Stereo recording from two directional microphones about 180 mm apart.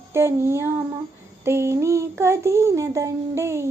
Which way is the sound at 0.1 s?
15° right (ahead or behind).